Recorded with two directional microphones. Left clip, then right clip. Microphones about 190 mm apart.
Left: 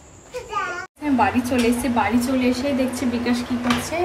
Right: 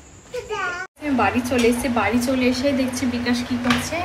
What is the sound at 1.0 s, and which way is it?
Speech, 10° left (ahead or behind).